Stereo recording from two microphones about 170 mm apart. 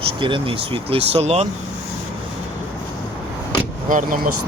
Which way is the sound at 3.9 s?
50° right (ahead or behind).